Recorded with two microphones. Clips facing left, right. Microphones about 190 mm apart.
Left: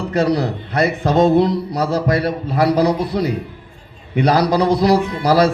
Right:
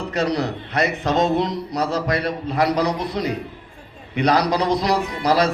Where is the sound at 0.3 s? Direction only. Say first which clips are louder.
Left 4 dB; 35° left (ahead or behind).